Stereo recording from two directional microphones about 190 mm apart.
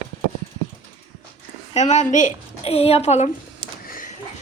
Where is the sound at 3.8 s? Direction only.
45° left (ahead or behind).